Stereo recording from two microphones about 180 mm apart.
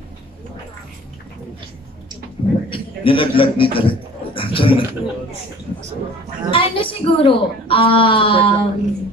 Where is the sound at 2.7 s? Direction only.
30° left (ahead or behind).